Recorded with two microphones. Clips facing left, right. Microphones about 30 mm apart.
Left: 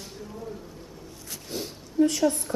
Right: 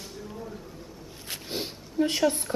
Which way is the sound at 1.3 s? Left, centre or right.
Right.